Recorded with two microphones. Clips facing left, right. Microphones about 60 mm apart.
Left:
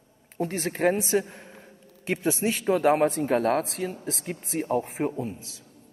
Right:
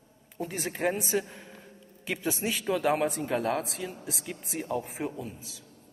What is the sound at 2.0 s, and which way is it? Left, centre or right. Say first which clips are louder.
A woman's voice: left 5 dB; left.